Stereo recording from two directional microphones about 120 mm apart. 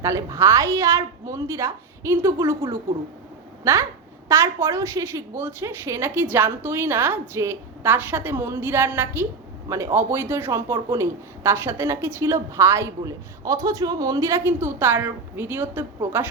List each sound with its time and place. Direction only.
0.0 s speech: 25° right (ahead or behind)